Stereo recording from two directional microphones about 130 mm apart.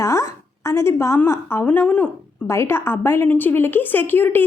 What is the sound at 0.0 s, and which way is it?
A woman's voice, 25° left (ahead or behind).